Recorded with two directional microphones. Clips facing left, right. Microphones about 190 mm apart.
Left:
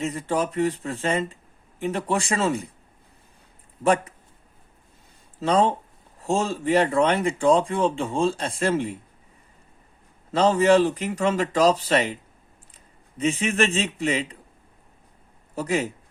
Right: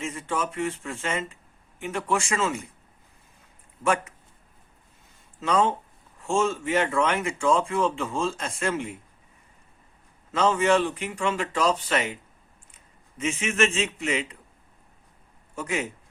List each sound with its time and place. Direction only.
0.0 s speech: 35° left (ahead or behind)
3.8 s speech: 35° left (ahead or behind)
5.4 s speech: 35° left (ahead or behind)
10.3 s speech: 35° left (ahead or behind)
15.5 s speech: 35° left (ahead or behind)